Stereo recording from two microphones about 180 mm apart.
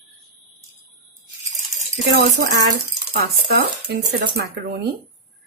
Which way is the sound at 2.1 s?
65° right (ahead or behind).